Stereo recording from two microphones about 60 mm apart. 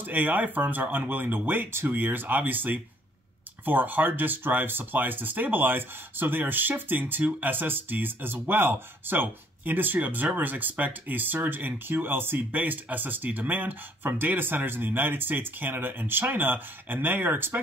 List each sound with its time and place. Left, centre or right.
0.0 s speech: right